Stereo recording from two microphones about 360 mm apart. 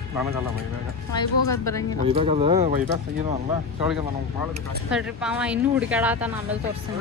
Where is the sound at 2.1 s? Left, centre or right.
Centre.